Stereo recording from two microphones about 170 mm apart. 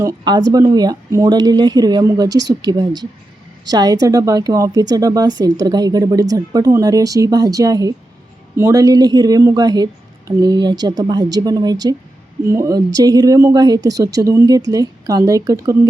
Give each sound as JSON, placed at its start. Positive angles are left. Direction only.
{"t": 0.0, "sound": "a woman's voice", "side_deg": -20}